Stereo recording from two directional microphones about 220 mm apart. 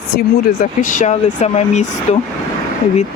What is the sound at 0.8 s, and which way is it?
Speech, 35° left (ahead or behind).